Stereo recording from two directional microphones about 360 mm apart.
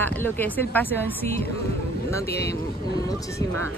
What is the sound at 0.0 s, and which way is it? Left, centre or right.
A woman's voice, centre.